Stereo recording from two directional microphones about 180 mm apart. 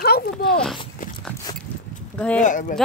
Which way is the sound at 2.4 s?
45° left (ahead or behind).